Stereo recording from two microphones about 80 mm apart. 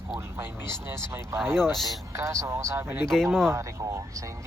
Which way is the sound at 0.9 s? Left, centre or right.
Right.